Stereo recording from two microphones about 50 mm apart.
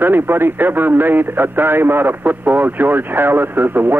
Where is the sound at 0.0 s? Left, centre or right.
Right.